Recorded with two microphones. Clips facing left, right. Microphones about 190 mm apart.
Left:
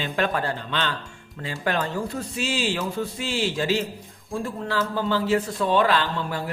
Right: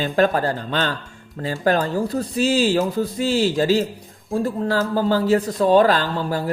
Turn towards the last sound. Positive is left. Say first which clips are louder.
# right 5 dB
turn(degrees=-40)  # may be behind; listen again after turning